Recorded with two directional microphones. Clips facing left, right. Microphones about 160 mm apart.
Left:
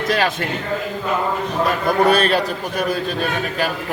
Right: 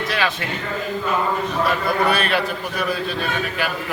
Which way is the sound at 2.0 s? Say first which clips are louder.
Left 4 dB; 40° left (ahead or behind).